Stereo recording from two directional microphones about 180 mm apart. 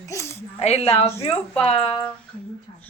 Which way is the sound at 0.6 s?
35° left (ahead or behind).